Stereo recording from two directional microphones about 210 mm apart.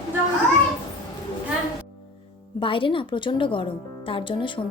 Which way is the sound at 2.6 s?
25° left (ahead or behind).